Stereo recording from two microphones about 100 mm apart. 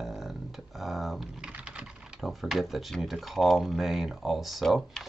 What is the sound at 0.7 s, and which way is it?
Speech, centre (ahead or behind).